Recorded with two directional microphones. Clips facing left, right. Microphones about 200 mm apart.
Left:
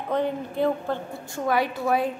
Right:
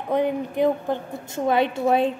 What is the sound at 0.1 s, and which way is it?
Speech, 15° right (ahead or behind).